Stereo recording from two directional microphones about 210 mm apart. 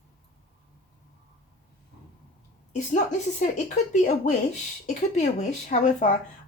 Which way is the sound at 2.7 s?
35° left (ahead or behind).